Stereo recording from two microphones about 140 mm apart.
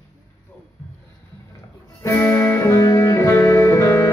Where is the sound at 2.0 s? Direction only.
15° left (ahead or behind).